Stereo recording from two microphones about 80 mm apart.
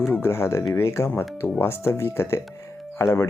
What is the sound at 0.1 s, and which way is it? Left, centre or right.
Speech, left.